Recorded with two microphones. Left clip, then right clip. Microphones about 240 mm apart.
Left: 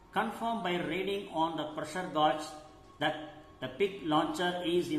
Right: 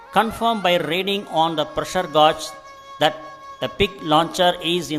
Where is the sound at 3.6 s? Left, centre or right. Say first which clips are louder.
Right 11 dB; right.